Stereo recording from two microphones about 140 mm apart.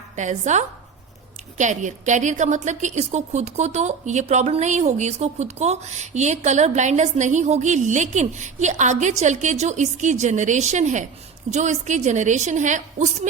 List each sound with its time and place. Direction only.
0.2 s a woman's voice: 60° right (ahead or behind)